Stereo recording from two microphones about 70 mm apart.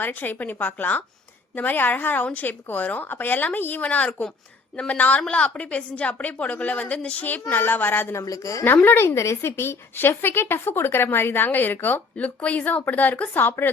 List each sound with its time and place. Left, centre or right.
0.0 s speech: left
8.1 s a woman's voice: left
8.6 s speech: left
9.0 s speech: left